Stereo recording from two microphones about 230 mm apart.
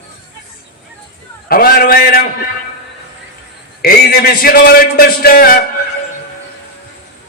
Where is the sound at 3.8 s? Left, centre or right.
Left.